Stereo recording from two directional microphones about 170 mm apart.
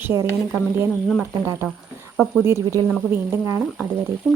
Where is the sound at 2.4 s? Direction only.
15° right (ahead or behind).